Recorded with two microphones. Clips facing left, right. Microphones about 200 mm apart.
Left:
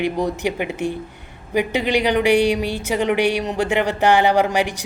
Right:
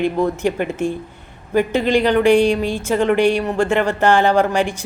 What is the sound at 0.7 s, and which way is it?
Speech, 65° left (ahead or behind).